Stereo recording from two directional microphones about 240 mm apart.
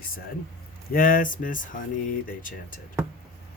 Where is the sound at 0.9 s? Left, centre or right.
Left.